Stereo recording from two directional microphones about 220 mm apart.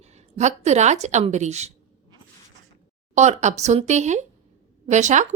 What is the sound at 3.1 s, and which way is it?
Speech, 30° right (ahead or behind).